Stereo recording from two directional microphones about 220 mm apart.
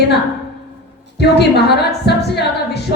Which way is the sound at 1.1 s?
50° left (ahead or behind).